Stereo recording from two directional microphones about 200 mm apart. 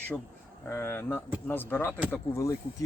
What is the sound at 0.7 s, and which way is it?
Speech, 10° left (ahead or behind).